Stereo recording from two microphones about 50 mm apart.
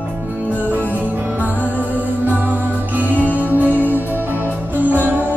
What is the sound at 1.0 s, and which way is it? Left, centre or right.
Music, right.